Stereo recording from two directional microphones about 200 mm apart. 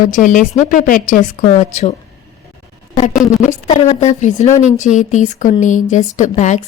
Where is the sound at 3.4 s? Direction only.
40° left (ahead or behind).